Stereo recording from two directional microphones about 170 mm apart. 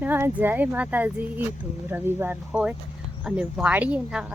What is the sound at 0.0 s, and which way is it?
Speech, 10° right (ahead or behind).